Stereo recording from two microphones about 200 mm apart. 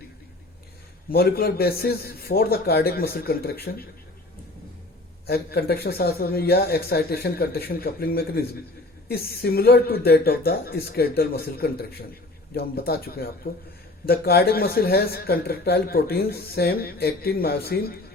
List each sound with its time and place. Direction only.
1.1 s speech: 50° left (ahead or behind)
5.2 s speech: 50° left (ahead or behind)